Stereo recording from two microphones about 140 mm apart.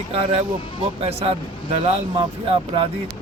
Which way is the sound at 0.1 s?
45° right (ahead or behind).